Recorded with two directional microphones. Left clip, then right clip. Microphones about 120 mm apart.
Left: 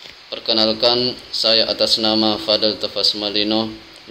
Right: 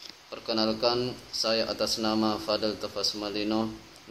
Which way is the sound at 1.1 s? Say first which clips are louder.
Left 11 dB; 35° left (ahead or behind).